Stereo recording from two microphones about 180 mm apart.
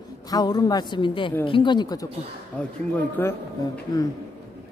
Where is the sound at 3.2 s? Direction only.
10° left (ahead or behind).